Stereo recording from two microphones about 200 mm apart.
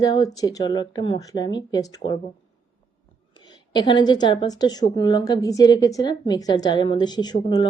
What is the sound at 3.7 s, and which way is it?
A woman's voice, 20° left (ahead or behind).